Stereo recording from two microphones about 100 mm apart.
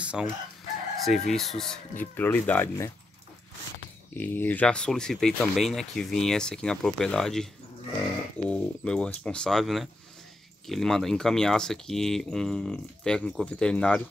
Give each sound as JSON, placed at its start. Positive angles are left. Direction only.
{"t": 0.0, "sound": "chicken", "side_deg": -10}
{"t": 1.0, "sound": "speech", "side_deg": 0}
{"t": 2.0, "sound": "speech", "side_deg": 20}
{"t": 4.1, "sound": "speech", "side_deg": 20}